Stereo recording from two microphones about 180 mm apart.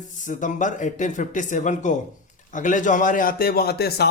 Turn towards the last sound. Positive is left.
turn(degrees=60)  # may be behind; listen again after turning